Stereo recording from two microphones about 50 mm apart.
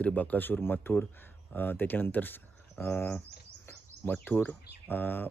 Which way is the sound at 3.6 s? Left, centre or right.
Left.